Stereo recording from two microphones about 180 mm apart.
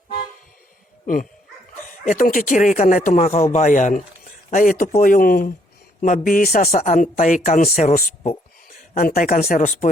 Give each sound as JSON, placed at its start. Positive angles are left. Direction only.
{"t": 1.0, "sound": "speech", "side_deg": 50}